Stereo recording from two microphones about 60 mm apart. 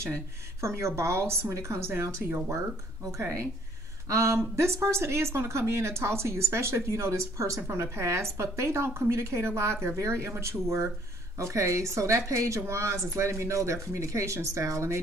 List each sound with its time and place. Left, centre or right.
0.6 s a woman's voice: right
4.1 s a woman's voice: right
7.6 s a woman's voice: right